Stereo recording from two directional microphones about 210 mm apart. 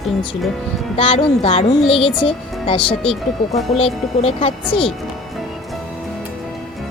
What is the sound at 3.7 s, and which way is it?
Speech, 30° left (ahead or behind).